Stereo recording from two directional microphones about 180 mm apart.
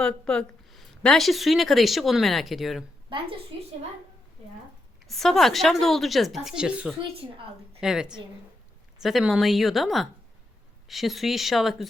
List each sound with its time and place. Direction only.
0.0 s a woman's voice: 5° left (ahead or behind)
3.1 s a woman's voice: 25° right (ahead or behind)
5.0 s a woman's voice: centre (ahead or behind)
7.2 s a woman's voice: 30° right (ahead or behind)
7.8 s a woman's voice: 5° right (ahead or behind)